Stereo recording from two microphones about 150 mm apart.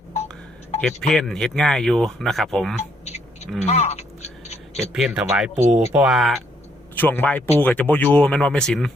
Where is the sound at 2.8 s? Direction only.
45° left (ahead or behind).